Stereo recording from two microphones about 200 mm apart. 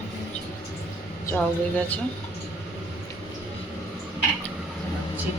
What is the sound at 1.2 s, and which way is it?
Speech, 10° left (ahead or behind).